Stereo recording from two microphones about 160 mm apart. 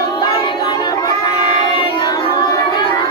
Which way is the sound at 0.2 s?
30° left (ahead or behind).